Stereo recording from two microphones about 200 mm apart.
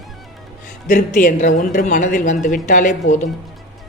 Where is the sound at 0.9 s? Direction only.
40° left (ahead or behind).